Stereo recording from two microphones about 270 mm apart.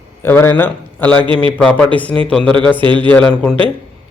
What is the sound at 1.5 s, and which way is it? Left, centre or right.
Speech, centre.